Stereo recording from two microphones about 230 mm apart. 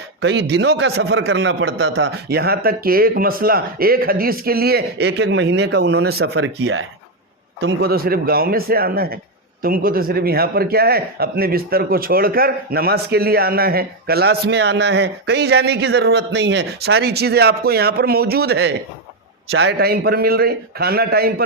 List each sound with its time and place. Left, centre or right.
0.2 s a man's voice: right